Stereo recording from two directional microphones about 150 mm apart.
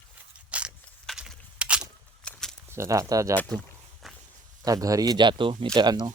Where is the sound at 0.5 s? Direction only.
5° right (ahead or behind).